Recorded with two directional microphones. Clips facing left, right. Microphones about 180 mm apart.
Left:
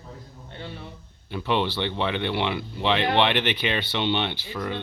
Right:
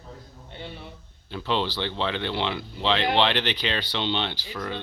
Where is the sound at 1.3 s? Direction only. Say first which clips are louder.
Left 2 dB; 15° left (ahead or behind).